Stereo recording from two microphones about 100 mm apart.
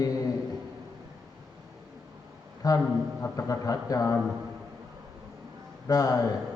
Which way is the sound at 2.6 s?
40° left (ahead or behind).